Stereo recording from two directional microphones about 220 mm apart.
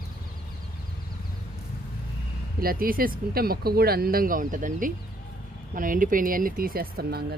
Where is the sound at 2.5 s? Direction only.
40° right (ahead or behind).